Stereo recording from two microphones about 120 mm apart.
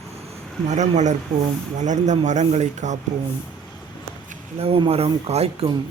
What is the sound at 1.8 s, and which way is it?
Speech, 90° right.